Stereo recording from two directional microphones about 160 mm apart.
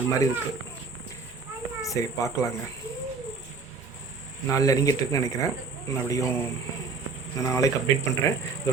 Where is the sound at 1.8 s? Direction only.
20° left (ahead or behind).